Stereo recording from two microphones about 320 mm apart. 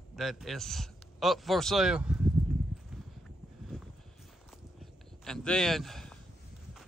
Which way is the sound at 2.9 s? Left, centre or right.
Centre.